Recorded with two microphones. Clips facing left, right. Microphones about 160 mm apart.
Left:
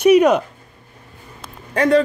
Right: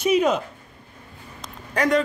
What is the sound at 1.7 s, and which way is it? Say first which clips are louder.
Speech: left 6 dB; 30° left (ahead or behind).